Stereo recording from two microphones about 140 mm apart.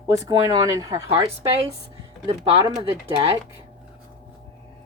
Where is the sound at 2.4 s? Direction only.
45° right (ahead or behind).